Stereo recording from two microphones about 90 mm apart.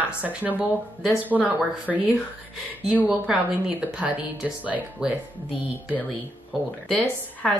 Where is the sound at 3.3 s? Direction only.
10° right (ahead or behind).